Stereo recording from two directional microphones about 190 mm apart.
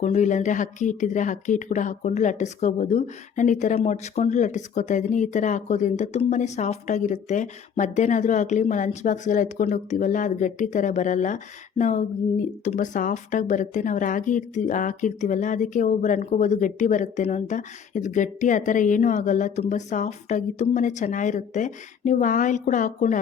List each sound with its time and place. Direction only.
0.0 s speech: 40° left (ahead or behind)